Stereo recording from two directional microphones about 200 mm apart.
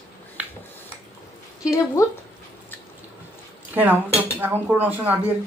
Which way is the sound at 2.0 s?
15° left (ahead or behind).